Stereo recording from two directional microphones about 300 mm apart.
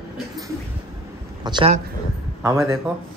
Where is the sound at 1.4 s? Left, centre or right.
Centre.